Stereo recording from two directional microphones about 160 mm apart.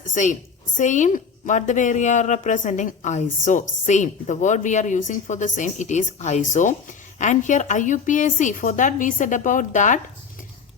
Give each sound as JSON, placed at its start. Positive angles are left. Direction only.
{"t": 0.1, "sound": "a woman's voice", "side_deg": 50}